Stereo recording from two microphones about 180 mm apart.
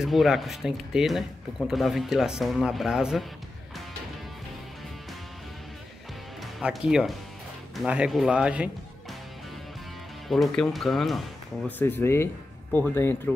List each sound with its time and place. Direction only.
0.0 s speech: centre (ahead or behind)
6.6 s speech: 5° right (ahead or behind)
10.2 s speech: centre (ahead or behind)
11.8 s speech: 15° left (ahead or behind)